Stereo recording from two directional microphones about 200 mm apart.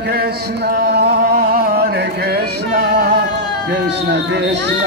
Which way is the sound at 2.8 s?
50° right (ahead or behind).